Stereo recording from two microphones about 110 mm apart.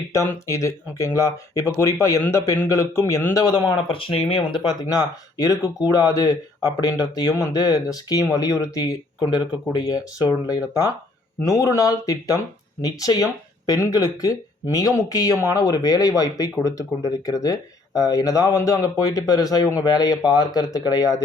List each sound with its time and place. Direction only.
0.1 s speech: 25° left (ahead or behind)
3.9 s speech: 55° left (ahead or behind)
4.8 s speech: 35° left (ahead or behind)